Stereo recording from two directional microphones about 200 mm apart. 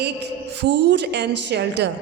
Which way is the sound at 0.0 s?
60° right (ahead or behind).